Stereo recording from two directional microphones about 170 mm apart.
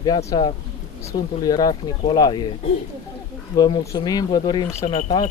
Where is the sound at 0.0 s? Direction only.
20° left (ahead or behind).